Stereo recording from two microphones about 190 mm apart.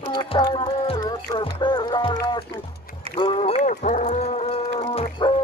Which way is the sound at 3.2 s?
30° left (ahead or behind).